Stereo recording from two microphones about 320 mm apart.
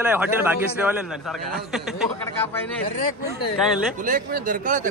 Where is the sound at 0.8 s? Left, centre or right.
Centre.